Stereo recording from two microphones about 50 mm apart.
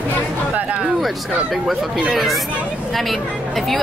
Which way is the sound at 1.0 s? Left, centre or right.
Centre.